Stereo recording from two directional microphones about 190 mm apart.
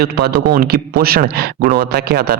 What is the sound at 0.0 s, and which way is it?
Speech, 55° right (ahead or behind).